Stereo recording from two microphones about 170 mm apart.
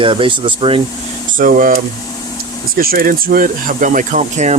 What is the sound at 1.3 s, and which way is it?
Speech, 55° right (ahead or behind).